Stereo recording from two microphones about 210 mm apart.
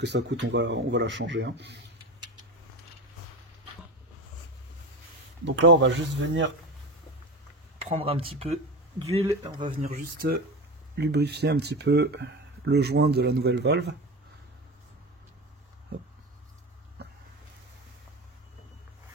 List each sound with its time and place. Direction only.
0.0 s speech: 55° right (ahead or behind)
5.4 s speech: 60° right (ahead or behind)
7.8 s speech: 25° right (ahead or behind)
9.2 s speech: 15° right (ahead or behind)
9.7 s speech: 40° right (ahead or behind)
17.0 s vehicle: 50° right (ahead or behind)